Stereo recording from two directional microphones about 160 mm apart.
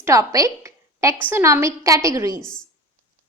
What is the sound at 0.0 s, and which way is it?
A woman's voice, 20° right (ahead or behind).